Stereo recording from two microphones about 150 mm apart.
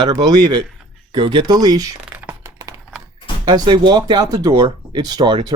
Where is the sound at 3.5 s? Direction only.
30° right (ahead or behind).